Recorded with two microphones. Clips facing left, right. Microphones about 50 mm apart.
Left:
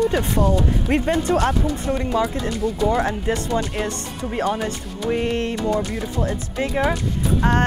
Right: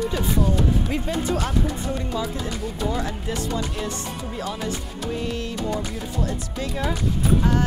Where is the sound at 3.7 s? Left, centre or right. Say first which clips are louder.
Left 3 dB; left.